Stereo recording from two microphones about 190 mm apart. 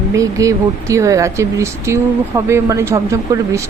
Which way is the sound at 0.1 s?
15° right (ahead or behind).